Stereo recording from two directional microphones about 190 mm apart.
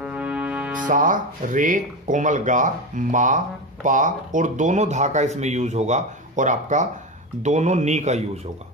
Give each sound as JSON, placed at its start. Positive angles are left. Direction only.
{"t": 0.0, "sound": "music", "side_deg": -5}
{"t": 0.8, "sound": "speech", "side_deg": -45}